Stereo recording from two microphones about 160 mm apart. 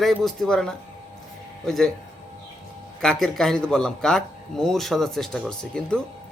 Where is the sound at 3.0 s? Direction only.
Centre (ahead or behind).